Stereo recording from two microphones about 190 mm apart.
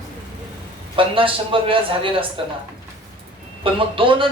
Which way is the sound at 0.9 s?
25° right (ahead or behind).